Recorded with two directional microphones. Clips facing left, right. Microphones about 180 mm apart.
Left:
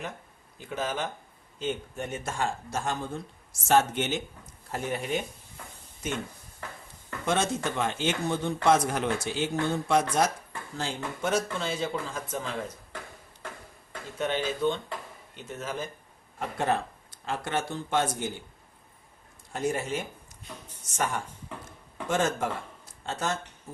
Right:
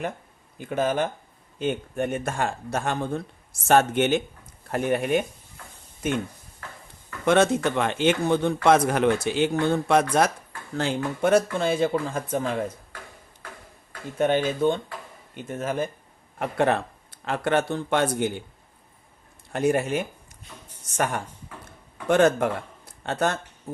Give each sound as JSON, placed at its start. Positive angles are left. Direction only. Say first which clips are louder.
{"t": 0.6, "sound": "speech", "louder": "right 7 dB", "side_deg": -55}
{"t": 7.3, "sound": "speech", "louder": "right 8 dB", "side_deg": -60}
{"t": 14.2, "sound": "speech", "louder": "right 7 dB", "side_deg": -55}
{"t": 16.4, "sound": "speech", "louder": "right 5 dB", "side_deg": -65}
{"t": 19.5, "sound": "speech", "louder": "right 7 dB", "side_deg": -65}